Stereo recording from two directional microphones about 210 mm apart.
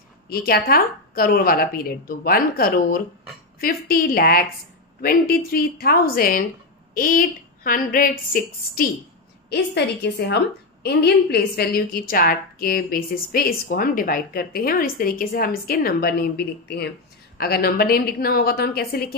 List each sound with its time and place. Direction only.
0.3 s a woman's voice: 45° left (ahead or behind)
9.5 s a woman's voice: 55° left (ahead or behind)